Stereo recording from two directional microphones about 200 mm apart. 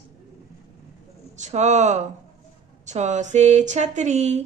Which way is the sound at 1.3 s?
35° right (ahead or behind).